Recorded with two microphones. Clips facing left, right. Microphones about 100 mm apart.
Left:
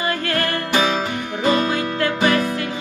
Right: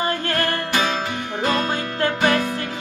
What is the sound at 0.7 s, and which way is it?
Music, 10° left (ahead or behind).